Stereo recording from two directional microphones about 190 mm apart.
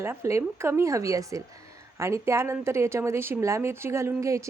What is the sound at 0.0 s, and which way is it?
A woman's voice, 15° right (ahead or behind).